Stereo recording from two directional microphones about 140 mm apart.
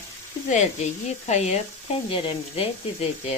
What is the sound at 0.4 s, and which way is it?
A woman's voice, 60° left (ahead or behind).